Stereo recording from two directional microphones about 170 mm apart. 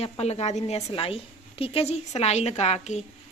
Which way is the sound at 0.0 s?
35° left (ahead or behind).